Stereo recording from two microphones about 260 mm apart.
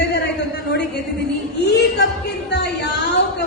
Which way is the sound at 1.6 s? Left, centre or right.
Left.